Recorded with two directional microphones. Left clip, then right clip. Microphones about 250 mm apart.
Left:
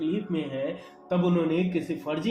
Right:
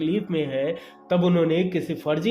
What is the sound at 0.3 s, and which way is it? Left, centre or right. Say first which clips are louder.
A man's voice: right 6 dB; right.